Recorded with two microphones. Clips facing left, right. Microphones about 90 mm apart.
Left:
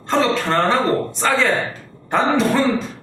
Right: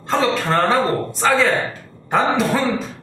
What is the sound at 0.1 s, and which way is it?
A man's voice, centre (ahead or behind).